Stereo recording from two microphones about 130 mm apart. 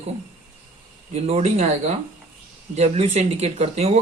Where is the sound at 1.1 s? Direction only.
50° right (ahead or behind).